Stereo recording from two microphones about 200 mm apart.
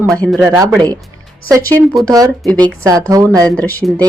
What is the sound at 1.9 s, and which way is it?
A woman's voice, 15° right (ahead or behind).